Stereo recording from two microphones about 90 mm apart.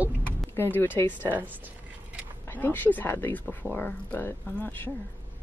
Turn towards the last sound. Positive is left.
turn(degrees=15)  # may be behind; listen again after turning